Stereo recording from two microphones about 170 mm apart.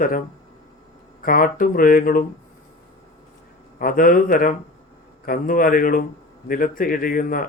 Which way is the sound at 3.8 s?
55° left (ahead or behind).